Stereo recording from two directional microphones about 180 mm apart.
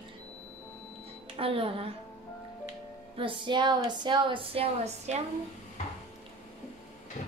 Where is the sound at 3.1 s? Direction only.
30° right (ahead or behind).